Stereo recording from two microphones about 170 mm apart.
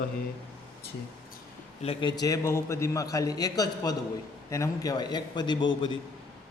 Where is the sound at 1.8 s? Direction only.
25° left (ahead or behind).